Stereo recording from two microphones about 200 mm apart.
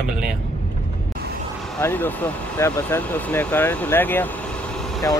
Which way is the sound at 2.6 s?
10° left (ahead or behind).